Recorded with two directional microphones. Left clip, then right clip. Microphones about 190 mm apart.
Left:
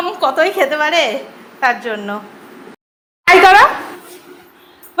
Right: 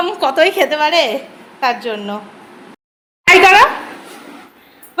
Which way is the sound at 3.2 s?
15° right (ahead or behind).